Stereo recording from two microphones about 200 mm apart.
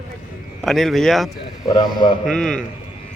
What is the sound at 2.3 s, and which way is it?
Speech, 5° left (ahead or behind).